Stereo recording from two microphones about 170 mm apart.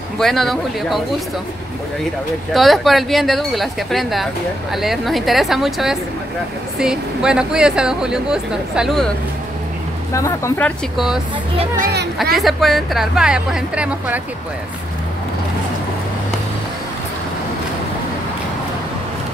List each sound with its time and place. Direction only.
0.2 s speech: centre (ahead or behind)
2.5 s speech: centre (ahead or behind)
10.1 s speech: 15° left (ahead or behind)
10.6 s speech: centre (ahead or behind)
12.4 s speech: centre (ahead or behind)